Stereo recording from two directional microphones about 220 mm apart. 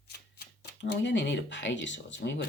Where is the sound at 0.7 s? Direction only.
50° left (ahead or behind).